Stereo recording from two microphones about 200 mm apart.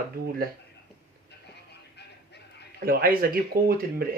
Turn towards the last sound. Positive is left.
turn(degrees=-50)  # may be behind; listen again after turning